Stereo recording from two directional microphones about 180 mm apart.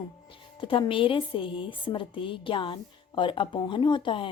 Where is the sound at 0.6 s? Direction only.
30° left (ahead or behind).